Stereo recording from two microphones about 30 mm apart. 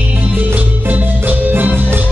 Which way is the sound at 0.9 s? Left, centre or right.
Right.